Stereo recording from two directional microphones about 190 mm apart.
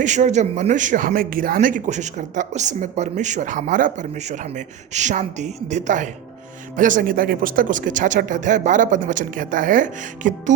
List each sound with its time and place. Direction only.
0.0 s speech: 40° right (ahead or behind)